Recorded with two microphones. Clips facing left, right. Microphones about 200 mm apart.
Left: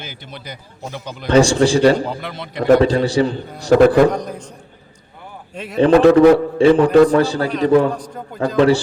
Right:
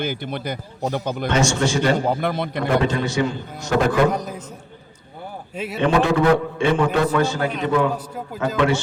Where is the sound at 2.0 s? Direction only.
50° right (ahead or behind).